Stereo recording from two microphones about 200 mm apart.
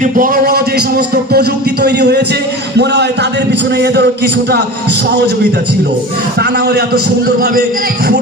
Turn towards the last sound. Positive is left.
turn(degrees=-50)  # may be behind; listen again after turning